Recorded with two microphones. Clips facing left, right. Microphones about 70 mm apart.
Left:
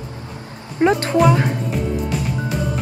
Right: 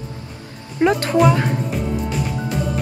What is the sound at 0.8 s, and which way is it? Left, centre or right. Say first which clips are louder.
Speech: left 1 dB; left.